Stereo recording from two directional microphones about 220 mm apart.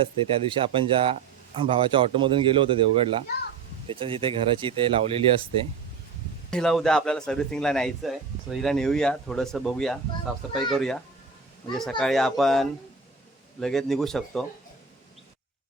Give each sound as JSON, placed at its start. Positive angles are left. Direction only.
{"t": 0.4, "sound": "speech", "side_deg": -25}
{"t": 6.5, "sound": "speech", "side_deg": 0}